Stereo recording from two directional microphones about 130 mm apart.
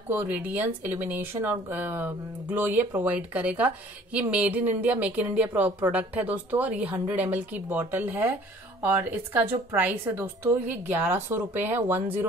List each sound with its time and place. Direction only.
0.1 s speech: 15° right (ahead or behind)